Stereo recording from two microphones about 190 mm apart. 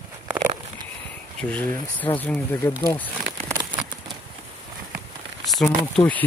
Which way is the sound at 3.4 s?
15° right (ahead or behind).